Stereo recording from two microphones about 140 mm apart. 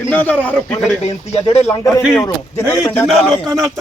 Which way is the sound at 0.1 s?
10° left (ahead or behind).